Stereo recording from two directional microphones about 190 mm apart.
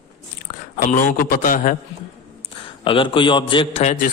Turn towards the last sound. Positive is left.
turn(degrees=40)  # may be behind; listen again after turning